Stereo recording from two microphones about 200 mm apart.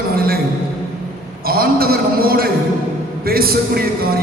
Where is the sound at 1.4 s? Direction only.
50° right (ahead or behind).